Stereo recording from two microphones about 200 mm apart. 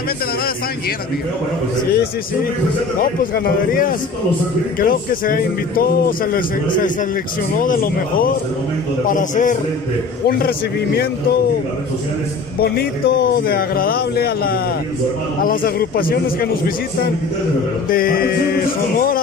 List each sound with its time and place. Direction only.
3.0 s a man's voice: 45° left (ahead or behind)
7.5 s a man's voice: 45° left (ahead or behind)
12.5 s a man's voice: 50° left (ahead or behind)